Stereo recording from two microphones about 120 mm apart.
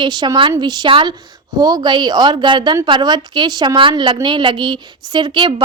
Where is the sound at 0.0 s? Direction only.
35° right (ahead or behind).